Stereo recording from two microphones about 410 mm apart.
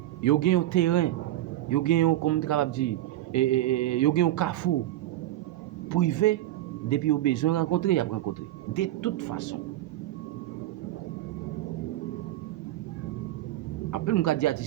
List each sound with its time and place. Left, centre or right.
0.2 s speech: left
5.9 s speech: left
13.9 s speech: left